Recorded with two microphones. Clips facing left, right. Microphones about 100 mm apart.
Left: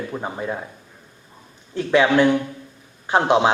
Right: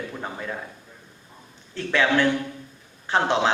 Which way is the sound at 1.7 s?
15° left (ahead or behind).